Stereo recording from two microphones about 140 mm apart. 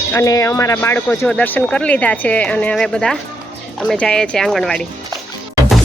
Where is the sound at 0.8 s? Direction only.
10° left (ahead or behind).